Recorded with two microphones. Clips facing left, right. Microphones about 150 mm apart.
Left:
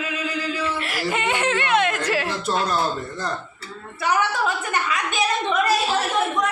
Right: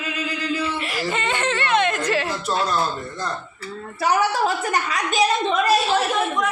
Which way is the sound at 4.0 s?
35° right (ahead or behind).